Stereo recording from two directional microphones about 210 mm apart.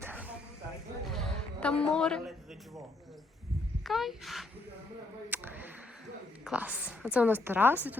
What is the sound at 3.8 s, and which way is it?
Speech, centre (ahead or behind).